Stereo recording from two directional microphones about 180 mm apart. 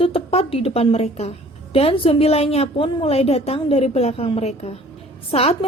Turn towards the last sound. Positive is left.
turn(degrees=35)  # may be behind; listen again after turning